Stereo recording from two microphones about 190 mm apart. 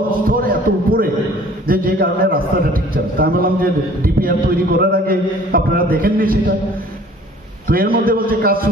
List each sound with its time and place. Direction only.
0.3 s a man's voice: 45° right (ahead or behind)
1.7 s a sound: 50° right (ahead or behind)
3.2 s a man's voice: 50° right (ahead or behind)
7.6 s a man's voice: 45° right (ahead or behind)